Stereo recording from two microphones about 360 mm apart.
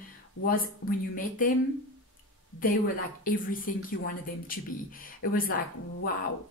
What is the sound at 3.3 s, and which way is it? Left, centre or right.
Speech, left.